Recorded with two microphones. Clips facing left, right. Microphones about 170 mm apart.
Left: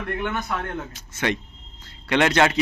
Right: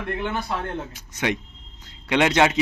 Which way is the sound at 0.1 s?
30° right (ahead or behind).